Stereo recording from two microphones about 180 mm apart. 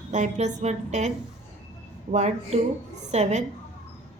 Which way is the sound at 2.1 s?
40° right (ahead or behind).